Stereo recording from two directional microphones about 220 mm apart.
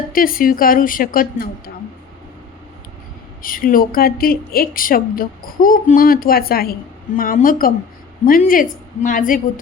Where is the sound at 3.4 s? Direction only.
40° left (ahead or behind).